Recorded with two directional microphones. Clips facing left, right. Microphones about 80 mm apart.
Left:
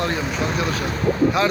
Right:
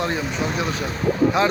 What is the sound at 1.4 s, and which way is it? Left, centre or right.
Speech, right.